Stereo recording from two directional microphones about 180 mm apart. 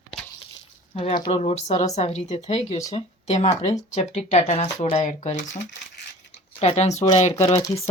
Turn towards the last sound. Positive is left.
turn(degrees=25)  # may be behind; listen again after turning